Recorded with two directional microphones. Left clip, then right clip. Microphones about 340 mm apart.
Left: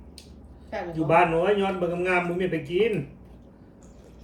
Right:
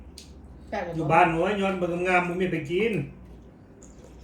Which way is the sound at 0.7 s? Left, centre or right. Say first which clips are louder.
Right 1 dB; centre.